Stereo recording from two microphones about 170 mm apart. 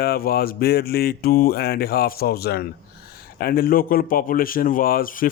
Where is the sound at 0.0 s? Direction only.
60° left (ahead or behind).